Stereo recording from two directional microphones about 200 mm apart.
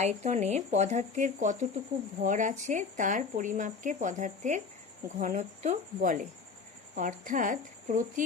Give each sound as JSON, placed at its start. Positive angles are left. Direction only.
{"t": 0.0, "sound": "speech", "side_deg": -35}